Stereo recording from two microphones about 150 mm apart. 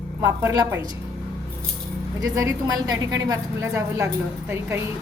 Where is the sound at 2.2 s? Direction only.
20° right (ahead or behind).